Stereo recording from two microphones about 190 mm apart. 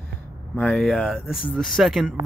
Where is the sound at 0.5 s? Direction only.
5° left (ahead or behind).